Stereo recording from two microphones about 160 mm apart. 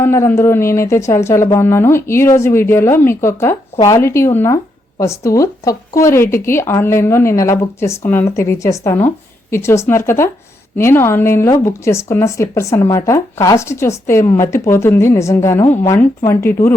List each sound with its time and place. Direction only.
0.0 s speech: 15° left (ahead or behind)